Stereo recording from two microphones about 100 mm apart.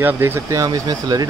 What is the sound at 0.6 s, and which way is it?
Speech, 40° right (ahead or behind).